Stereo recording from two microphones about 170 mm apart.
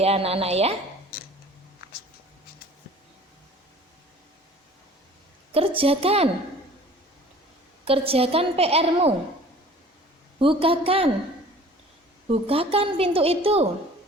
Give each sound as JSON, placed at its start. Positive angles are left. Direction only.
{"t": 0.0, "sound": "a woman's voice", "side_deg": -35}
{"t": 5.5, "sound": "a woman's voice", "side_deg": -35}
{"t": 7.9, "sound": "a woman's voice", "side_deg": -35}
{"t": 10.4, "sound": "a woman's voice", "side_deg": -30}
{"t": 12.3, "sound": "a woman's voice", "side_deg": -35}